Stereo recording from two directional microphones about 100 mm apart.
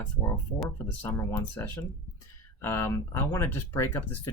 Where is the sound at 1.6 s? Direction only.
30° left (ahead or behind).